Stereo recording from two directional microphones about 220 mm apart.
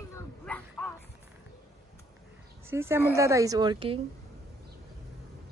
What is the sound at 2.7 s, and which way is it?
A woman's voice, 10° right (ahead or behind).